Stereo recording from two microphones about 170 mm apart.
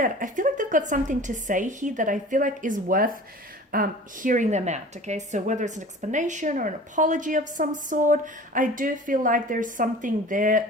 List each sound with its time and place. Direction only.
0.0 s a woman's voice: 50° right (ahead or behind)